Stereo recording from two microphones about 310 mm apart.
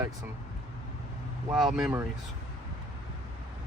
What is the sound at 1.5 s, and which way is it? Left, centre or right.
Speech, centre.